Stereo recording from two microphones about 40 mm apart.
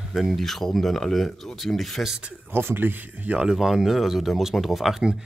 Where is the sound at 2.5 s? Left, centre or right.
Right.